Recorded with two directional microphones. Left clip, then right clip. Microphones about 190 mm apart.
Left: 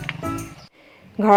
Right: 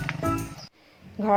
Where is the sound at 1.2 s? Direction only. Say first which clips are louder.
Left 8 dB; 30° left (ahead or behind).